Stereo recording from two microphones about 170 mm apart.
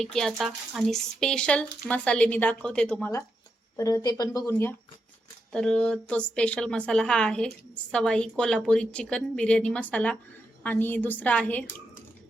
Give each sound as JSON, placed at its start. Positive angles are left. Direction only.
{"t": 0.0, "sound": "a woman's voice", "side_deg": 5}
{"t": 3.8, "sound": "speech", "side_deg": 20}
{"t": 5.5, "sound": "a woman's voice", "side_deg": 5}